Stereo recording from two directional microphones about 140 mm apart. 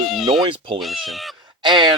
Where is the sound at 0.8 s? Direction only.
Centre (ahead or behind).